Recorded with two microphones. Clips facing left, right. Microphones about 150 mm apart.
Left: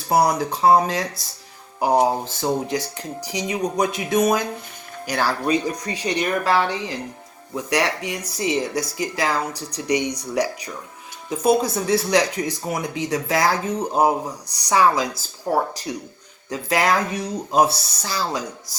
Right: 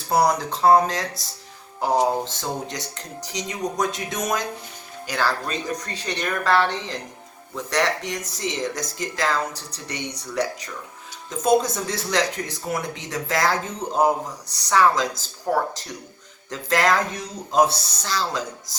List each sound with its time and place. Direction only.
0.1 s speech: 10° left (ahead or behind)
2.2 s speech: 10° left (ahead or behind)